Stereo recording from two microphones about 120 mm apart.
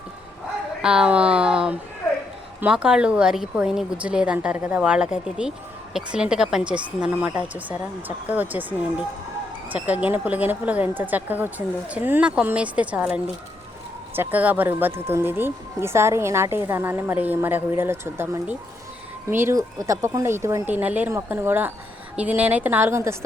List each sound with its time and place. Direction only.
0.8 s speech: 5° right (ahead or behind)
9.6 s speech: 15° right (ahead or behind)